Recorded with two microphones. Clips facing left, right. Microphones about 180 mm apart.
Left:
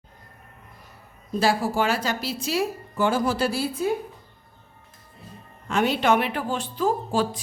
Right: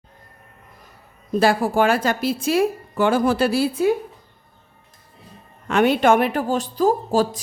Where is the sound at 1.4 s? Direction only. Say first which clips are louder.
Right 5 dB; 55° right (ahead or behind).